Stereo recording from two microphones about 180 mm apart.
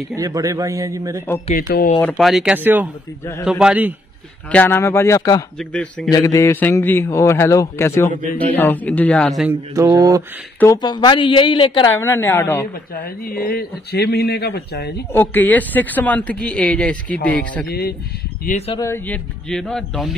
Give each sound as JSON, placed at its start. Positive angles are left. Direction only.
{"t": 0.1, "sound": "a man's voice", "side_deg": -20}
{"t": 1.7, "sound": "a man's voice", "side_deg": 55}
{"t": 2.0, "sound": "speech", "side_deg": 5}
{"t": 4.5, "sound": "a man's voice", "side_deg": 10}
{"t": 5.6, "sound": "speech", "side_deg": 5}
{"t": 6.0, "sound": "a man's voice", "side_deg": 20}
{"t": 9.8, "sound": "mantra", "side_deg": -20}
{"t": 10.6, "sound": "a woman's voice", "side_deg": 20}
{"t": 11.9, "sound": "a man's voice", "side_deg": 15}
{"t": 13.0, "sound": "a man's voice", "side_deg": 55}
{"t": 15.1, "sound": "a man's voice", "side_deg": 10}
{"t": 17.6, "sound": "a man's voice", "side_deg": 60}
{"t": 18.8, "sound": "speech", "side_deg": 10}